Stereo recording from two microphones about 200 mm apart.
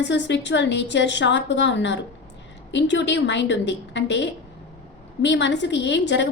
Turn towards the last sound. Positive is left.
turn(degrees=60)  # may be behind; listen again after turning